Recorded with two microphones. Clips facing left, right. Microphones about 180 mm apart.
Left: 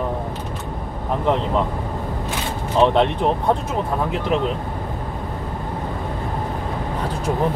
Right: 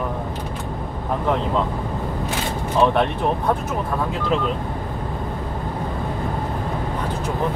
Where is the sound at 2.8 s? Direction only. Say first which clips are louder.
Left 2 dB; 20° left (ahead or behind).